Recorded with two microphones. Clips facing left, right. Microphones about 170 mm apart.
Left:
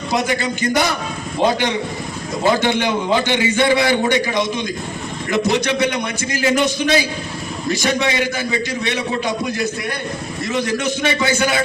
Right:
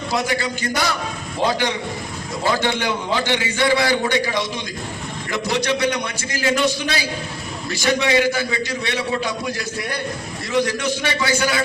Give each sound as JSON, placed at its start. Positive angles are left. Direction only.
{"t": 0.1, "sound": "a man's voice", "side_deg": 20}
{"t": 10.5, "sound": "a man's voice", "side_deg": 20}